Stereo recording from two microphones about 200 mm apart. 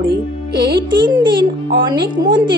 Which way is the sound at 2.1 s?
25° right (ahead or behind).